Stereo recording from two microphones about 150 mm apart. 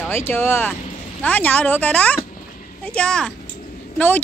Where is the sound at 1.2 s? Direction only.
10° left (ahead or behind).